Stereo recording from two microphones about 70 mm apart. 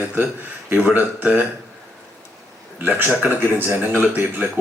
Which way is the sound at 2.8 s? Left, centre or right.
Right.